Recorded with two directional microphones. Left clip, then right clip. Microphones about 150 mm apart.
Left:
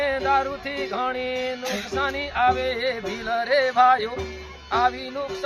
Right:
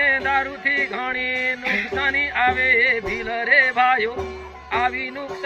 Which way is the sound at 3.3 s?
5° right (ahead or behind).